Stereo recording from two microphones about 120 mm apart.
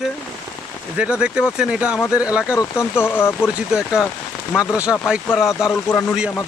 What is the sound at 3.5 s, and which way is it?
Speech, 5° right (ahead or behind).